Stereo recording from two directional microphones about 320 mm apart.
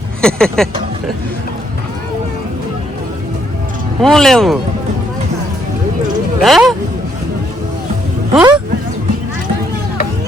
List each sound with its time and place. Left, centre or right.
0.2 s speech: centre
4.0 s speech: centre
6.4 s speech: centre
8.4 s speech: centre